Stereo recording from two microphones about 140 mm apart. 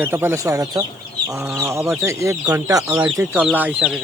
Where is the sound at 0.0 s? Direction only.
15° right (ahead or behind).